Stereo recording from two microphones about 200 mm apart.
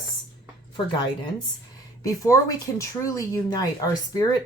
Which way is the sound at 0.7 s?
20° left (ahead or behind).